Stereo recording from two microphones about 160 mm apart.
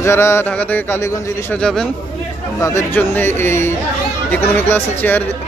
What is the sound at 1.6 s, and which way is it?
Speech, 5° left (ahead or behind).